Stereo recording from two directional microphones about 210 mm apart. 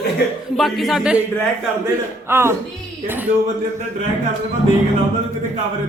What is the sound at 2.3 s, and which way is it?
Speech, 10° right (ahead or behind).